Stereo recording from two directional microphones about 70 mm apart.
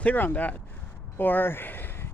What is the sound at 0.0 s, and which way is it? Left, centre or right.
Speech, left.